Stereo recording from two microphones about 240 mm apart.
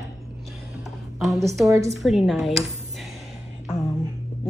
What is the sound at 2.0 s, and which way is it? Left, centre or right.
Speech, centre.